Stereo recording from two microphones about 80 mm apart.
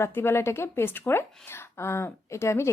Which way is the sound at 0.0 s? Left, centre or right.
Left.